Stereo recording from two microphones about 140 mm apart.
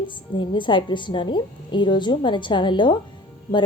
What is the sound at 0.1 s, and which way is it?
A woman's voice, 35° left (ahead or behind).